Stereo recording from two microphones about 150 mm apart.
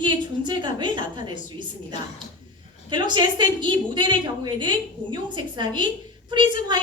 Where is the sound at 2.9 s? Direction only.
30° right (ahead or behind).